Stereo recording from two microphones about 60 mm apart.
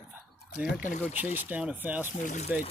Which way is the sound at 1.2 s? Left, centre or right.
Right.